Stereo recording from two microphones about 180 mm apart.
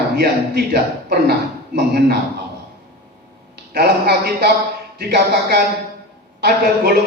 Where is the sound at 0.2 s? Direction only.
60° right (ahead or behind).